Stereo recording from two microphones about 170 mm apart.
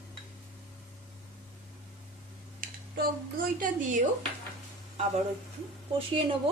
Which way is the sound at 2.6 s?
60° right (ahead or behind).